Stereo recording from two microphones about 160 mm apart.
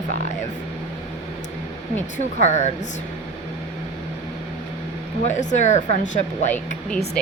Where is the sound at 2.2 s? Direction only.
45° left (ahead or behind).